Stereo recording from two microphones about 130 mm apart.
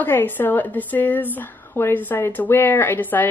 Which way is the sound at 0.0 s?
15° left (ahead or behind).